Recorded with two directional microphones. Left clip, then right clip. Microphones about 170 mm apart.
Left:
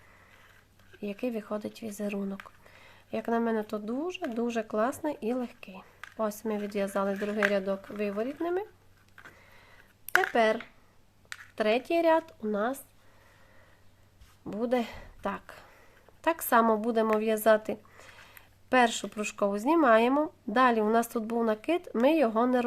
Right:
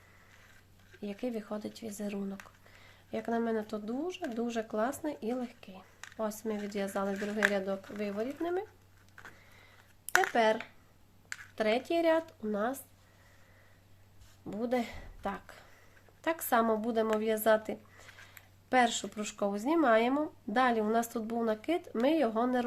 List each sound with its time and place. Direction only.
1.0 s speech: 30° left (ahead or behind)
10.3 s speech: 30° left (ahead or behind)
14.4 s speech: 30° left (ahead or behind)